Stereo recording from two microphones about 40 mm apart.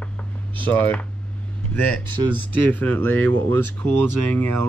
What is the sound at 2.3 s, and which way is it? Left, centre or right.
Speech, left.